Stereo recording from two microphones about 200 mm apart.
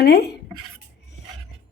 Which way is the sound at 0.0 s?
55° left (ahead or behind).